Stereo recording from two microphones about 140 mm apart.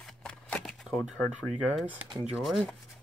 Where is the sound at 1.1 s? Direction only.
5° left (ahead or behind).